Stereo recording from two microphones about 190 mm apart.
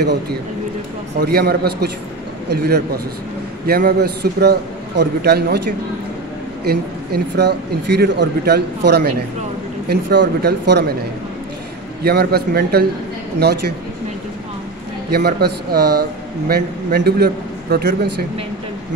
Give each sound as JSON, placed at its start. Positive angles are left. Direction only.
{"t": 1.2, "sound": "a man's voice", "side_deg": -55}
{"t": 6.6, "sound": "a man's voice", "side_deg": -55}
{"t": 12.0, "sound": "a man's voice", "side_deg": -55}
{"t": 15.0, "sound": "a man's voice", "side_deg": -55}